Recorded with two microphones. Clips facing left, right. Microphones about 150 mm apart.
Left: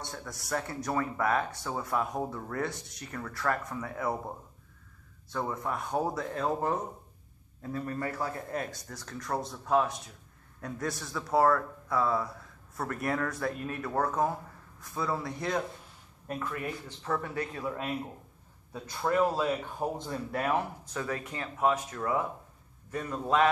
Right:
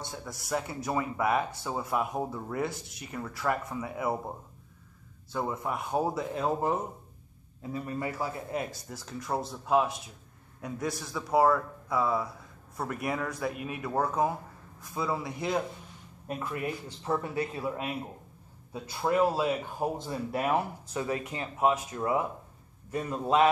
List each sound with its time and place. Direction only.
0.0 s speech: 5° right (ahead or behind)
5.3 s a man's voice: 5° right (ahead or behind)